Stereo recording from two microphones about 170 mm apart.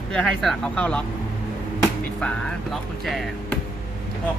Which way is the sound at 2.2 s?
5° left (ahead or behind).